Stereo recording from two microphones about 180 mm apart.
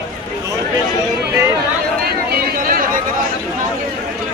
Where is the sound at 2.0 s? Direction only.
55° right (ahead or behind).